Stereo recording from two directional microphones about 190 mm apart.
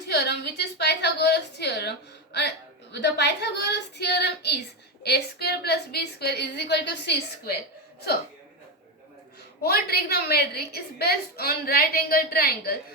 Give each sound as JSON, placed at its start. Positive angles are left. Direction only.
{"t": 0.1, "sound": "a sound", "side_deg": 60}
{"t": 2.9, "sound": "a woman's voice", "side_deg": 65}
{"t": 9.6, "sound": "a woman's voice", "side_deg": 55}